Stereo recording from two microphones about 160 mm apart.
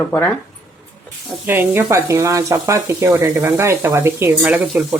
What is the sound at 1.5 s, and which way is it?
Speech, 15° right (ahead or behind).